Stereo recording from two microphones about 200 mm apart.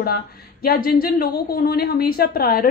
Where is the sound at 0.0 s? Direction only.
50° left (ahead or behind).